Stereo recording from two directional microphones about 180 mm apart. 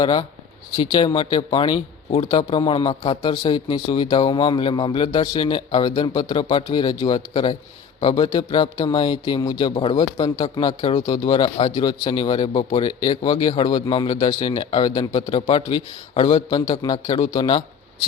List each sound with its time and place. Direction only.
0.0 s a man's voice: 20° left (ahead or behind)